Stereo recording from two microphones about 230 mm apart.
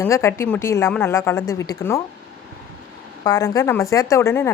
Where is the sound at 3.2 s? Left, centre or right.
Centre.